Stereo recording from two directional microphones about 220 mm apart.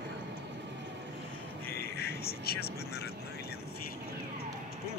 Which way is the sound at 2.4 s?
45° left (ahead or behind).